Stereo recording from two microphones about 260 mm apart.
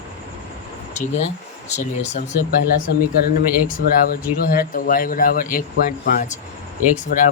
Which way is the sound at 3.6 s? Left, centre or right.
Left.